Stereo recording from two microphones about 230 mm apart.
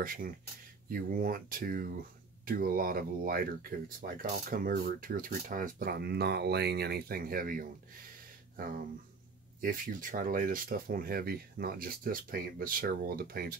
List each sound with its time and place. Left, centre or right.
0.0 s speech: right
9.6 s speech: right